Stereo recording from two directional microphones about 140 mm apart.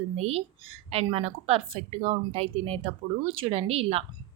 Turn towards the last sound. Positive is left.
turn(degrees=-45)  # may be behind; listen again after turning